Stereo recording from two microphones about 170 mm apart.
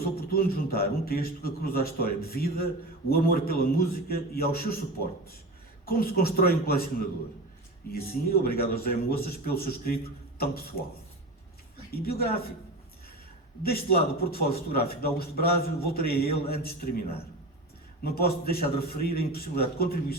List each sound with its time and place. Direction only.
0.0 s a man's voice: 60° left (ahead or behind)
8.4 s a man's voice: 65° left (ahead or behind)
12.0 s a man's voice: 65° left (ahead or behind)
13.6 s a man's voice: 65° left (ahead or behind)